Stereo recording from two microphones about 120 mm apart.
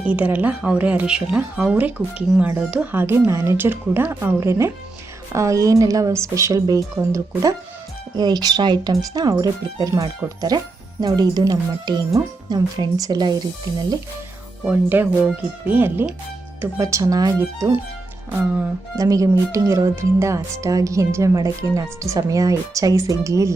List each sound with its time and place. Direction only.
0.0 s speech: 10° right (ahead or behind); by 13.3 s 35° right (ahead or behind)
14.7 s speech: 15° right (ahead or behind)
18.9 s speech: 30° right (ahead or behind)